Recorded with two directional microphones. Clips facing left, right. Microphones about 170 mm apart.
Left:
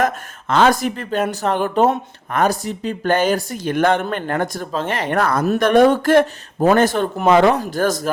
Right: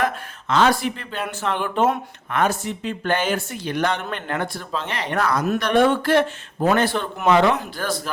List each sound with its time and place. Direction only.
0.0 s speech: 50° left (ahead or behind)
4.0 s speech: 40° left (ahead or behind)